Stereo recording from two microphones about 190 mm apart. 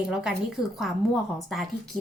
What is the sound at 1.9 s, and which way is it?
Speech, 20° left (ahead or behind).